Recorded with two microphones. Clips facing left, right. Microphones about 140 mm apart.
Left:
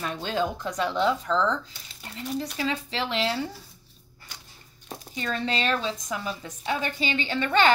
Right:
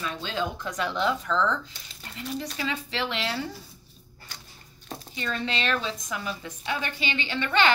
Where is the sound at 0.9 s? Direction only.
30° left (ahead or behind).